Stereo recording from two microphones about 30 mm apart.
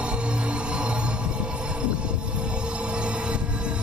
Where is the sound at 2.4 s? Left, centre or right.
Right.